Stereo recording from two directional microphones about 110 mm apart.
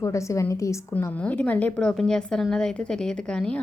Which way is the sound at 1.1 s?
10° left (ahead or behind).